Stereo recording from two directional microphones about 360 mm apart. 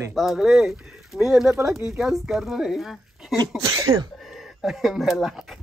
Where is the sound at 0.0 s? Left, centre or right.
Centre.